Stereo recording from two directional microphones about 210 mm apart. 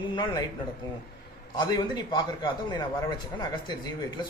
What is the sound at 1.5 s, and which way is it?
Speech, 20° left (ahead or behind).